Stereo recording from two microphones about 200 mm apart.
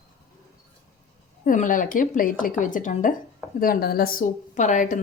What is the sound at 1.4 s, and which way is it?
A woman's voice, 40° left (ahead or behind).